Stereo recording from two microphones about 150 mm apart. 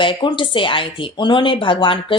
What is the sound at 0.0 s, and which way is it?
A woman's voice, 30° left (ahead or behind).